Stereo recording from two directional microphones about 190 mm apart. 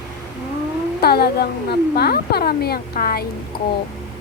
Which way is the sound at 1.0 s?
55° left (ahead or behind).